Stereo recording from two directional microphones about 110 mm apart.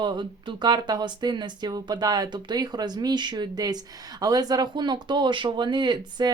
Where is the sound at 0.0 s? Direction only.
45° right (ahead or behind).